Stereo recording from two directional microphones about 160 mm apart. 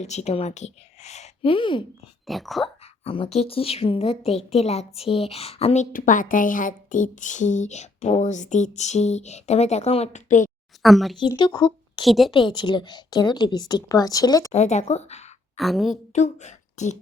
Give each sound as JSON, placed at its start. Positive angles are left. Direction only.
{"t": 0.0, "sound": "a woman's voice", "side_deg": 45}
{"t": 2.2, "sound": "speech", "side_deg": 0}
{"t": 3.0, "sound": "a woman's voice", "side_deg": 35}
{"t": 10.8, "sound": "speech", "side_deg": 0}
{"t": 11.2, "sound": "speech", "side_deg": 30}
{"t": 12.0, "sound": "speech", "side_deg": 0}
{"t": 12.3, "sound": "a woman's voice", "side_deg": 30}
{"t": 14.5, "sound": "a woman's voice", "side_deg": 45}
{"t": 15.5, "sound": "speech", "side_deg": 0}
{"t": 16.1, "sound": "speech", "side_deg": 45}